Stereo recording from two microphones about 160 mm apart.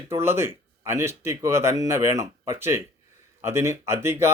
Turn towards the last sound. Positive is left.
turn(degrees=-15)  # may be behind; listen again after turning